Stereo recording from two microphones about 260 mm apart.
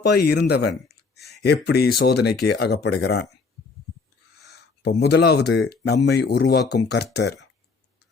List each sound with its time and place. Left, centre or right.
0.0 s speech: left
4.4 s speech: left